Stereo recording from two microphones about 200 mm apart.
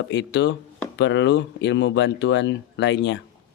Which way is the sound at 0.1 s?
60° left (ahead or behind).